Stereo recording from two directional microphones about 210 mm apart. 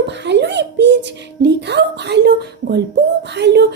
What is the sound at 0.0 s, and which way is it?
A child's voice, 55° right (ahead or behind).